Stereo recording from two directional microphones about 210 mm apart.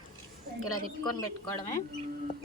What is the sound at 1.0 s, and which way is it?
Speech, 20° left (ahead or behind).